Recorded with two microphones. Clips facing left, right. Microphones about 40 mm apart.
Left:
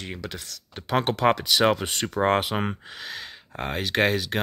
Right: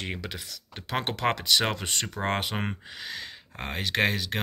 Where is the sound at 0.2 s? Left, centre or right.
Centre.